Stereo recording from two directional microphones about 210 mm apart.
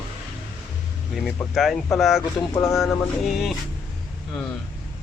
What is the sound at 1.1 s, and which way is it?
Speech, centre (ahead or behind).